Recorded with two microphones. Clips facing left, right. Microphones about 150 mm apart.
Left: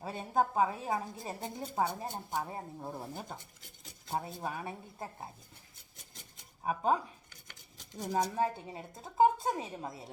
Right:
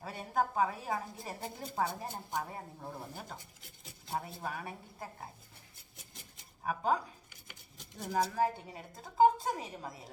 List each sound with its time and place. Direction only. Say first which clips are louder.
0.0 s a woman's voice: left 2 dB; 25° left (ahead or behind)
6.6 s speech: left 2 dB; 20° left (ahead or behind)
7.4 s a sound: right 3 dB; 5° right (ahead or behind)
8.1 s a woman's voice: even; 20° left (ahead or behind)